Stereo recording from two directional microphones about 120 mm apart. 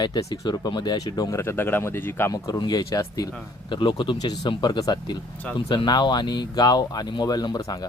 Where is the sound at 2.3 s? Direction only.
35° left (ahead or behind).